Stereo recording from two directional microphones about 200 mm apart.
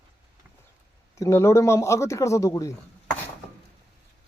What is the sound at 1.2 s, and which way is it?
Speech, 15° left (ahead or behind).